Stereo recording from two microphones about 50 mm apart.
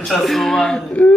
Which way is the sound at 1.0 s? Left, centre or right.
Left.